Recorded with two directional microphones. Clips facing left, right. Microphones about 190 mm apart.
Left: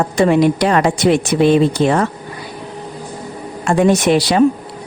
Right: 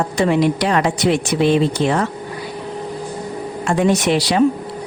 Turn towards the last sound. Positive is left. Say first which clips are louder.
# left 3 dB
turn(degrees=50)  # may be behind; listen again after turning